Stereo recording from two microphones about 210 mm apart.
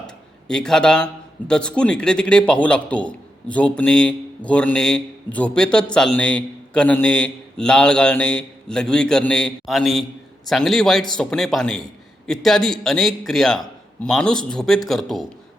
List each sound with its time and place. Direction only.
0.4 s a man's voice: 5° left (ahead or behind)